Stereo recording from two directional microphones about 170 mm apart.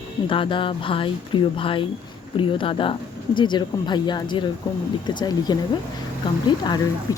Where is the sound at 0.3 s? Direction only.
30° left (ahead or behind).